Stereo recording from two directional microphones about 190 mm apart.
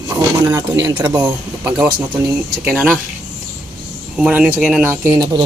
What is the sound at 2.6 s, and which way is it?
Speech, 10° right (ahead or behind).